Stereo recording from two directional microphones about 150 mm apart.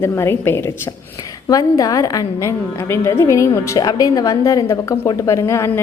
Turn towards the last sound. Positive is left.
turn(degrees=20)  # may be behind; listen again after turning